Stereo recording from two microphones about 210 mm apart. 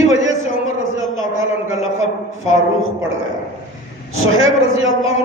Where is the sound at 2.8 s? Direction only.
70° right (ahead or behind).